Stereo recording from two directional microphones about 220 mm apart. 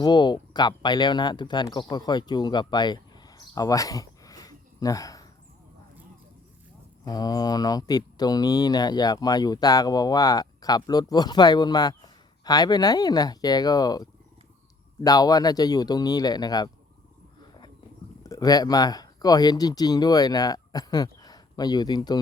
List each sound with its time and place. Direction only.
0.0 s speech: 20° left (ahead or behind)
7.0 s speech: 15° left (ahead or behind)
18.2 s speech: 15° left (ahead or behind)